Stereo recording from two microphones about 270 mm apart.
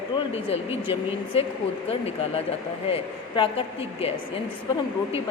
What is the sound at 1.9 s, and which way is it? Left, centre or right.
Speech, left.